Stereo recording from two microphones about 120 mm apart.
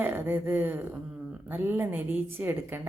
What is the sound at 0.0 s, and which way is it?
A woman's voice, 15° right (ahead or behind).